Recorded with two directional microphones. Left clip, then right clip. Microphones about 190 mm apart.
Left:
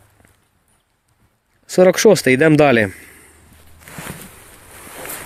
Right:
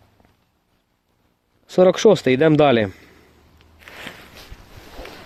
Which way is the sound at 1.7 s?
5° right (ahead or behind).